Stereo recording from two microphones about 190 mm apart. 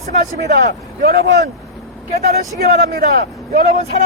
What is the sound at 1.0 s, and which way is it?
Speech, 55° right (ahead or behind).